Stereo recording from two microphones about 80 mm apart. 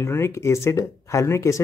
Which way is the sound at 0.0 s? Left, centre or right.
Left.